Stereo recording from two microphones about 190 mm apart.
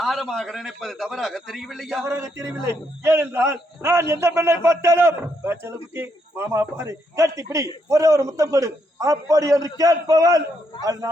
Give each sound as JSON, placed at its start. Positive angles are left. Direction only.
{"t": 0.0, "sound": "a man's voice", "side_deg": 0}
{"t": 2.0, "sound": "a man's voice", "side_deg": -15}